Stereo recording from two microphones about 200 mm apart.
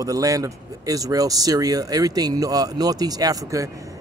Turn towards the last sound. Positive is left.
turn(degrees=-15)  # may be behind; listen again after turning